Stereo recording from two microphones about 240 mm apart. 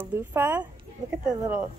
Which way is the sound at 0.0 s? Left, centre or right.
Centre.